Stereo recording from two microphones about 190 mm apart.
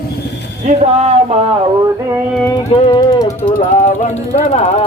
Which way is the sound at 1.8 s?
15° right (ahead or behind).